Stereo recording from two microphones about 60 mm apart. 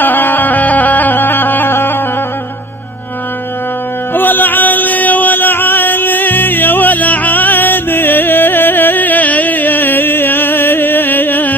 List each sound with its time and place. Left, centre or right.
0.0 s music: left
4.1 s music: left